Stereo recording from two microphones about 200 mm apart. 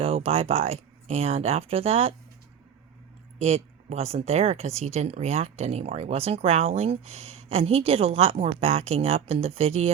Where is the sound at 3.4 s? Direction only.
30° right (ahead or behind).